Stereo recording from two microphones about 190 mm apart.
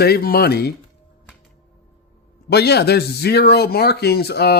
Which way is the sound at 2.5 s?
60° left (ahead or behind).